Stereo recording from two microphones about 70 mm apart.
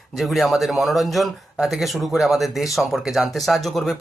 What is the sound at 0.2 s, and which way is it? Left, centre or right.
Speech, centre.